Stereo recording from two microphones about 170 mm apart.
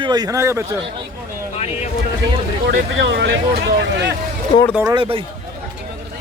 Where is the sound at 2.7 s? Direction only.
90° right.